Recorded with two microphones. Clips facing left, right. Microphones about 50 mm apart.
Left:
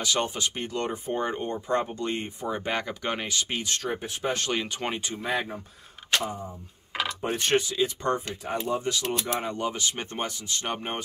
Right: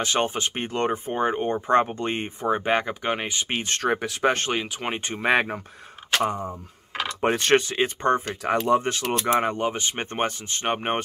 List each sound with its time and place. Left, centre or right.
0.0 s speech: right
1.7 s speech: right
2.9 s speech: right
3.4 s speech: right
3.8 s speech: right
4.6 s speech: centre
5.1 s speech: right
8.5 s speech: right
9.3 s speech: right
9.6 s speech: right